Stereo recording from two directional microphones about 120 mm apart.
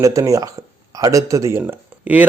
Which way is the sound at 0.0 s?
25° right (ahead or behind).